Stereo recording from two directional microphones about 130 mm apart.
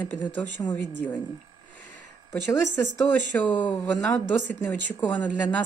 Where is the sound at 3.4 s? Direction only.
10° left (ahead or behind).